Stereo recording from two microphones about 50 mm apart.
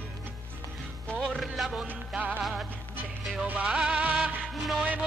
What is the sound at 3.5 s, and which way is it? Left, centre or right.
Music, right.